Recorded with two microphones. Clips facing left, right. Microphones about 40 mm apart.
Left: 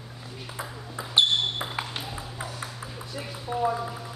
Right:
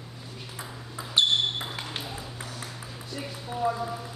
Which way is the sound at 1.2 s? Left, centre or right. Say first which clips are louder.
Left 2 dB; centre.